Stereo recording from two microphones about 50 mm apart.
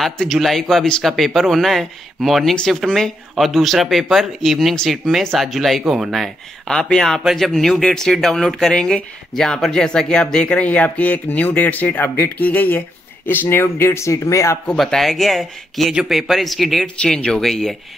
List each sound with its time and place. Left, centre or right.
0.3 s speech: centre
5.9 s speech: centre
6.7 s speech: centre; by 14.6 s left
14.9 s speech: centre
16.8 s speech: centre